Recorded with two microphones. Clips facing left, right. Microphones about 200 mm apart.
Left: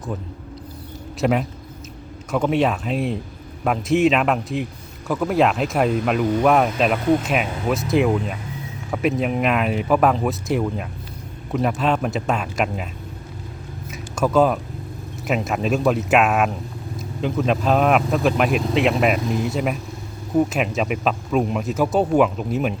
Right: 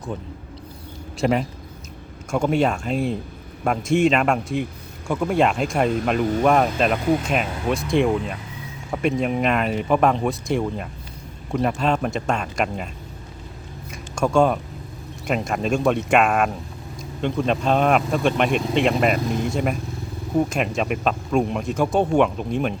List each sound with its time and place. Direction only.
1.2 s speech: centre (ahead or behind)
13.9 s a sound: 5° left (ahead or behind)
15.3 s speech: 5° left (ahead or behind)